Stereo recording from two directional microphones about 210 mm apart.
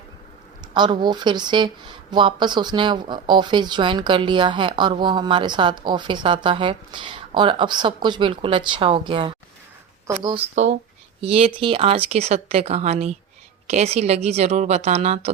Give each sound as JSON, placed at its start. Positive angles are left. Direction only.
{"t": 0.7, "sound": "a woman's voice", "side_deg": -20}